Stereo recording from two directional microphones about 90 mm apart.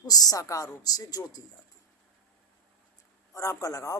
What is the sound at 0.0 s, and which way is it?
A woman's voice, 45° left (ahead or behind).